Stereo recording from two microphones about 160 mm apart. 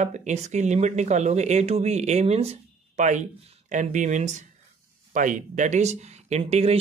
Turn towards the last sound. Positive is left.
turn(degrees=-40)  # may be behind; listen again after turning